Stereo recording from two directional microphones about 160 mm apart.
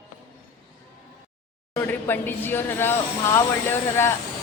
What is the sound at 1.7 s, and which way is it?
Speech, 15° left (ahead or behind).